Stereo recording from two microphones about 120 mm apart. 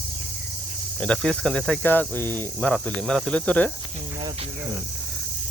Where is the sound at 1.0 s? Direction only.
5° left (ahead or behind).